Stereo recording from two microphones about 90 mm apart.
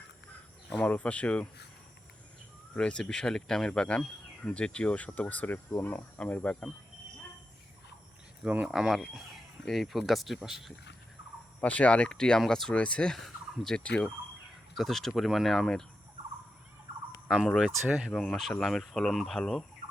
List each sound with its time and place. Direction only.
0.8 s speech: 15° left (ahead or behind)
2.7 s speech: 10° left (ahead or behind)
8.4 s speech: 10° right (ahead or behind)
11.6 s speech: 15° left (ahead or behind)
17.2 s speech: 5° right (ahead or behind)
18.1 s speech: 10° left (ahead or behind)